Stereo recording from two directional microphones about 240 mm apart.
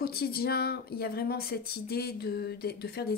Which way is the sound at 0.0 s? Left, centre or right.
Left.